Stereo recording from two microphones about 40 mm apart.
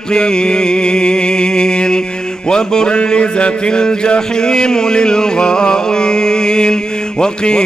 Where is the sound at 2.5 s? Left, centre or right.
Centre.